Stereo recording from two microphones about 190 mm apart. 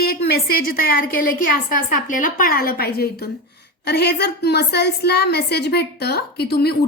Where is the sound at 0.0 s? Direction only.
55° left (ahead or behind).